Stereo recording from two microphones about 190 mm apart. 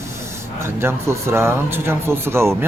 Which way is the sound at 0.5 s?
15° right (ahead or behind).